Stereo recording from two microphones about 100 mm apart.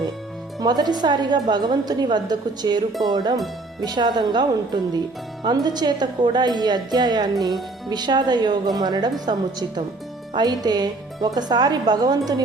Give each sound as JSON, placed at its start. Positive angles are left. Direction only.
{"t": 0.6, "sound": "speech", "side_deg": -40}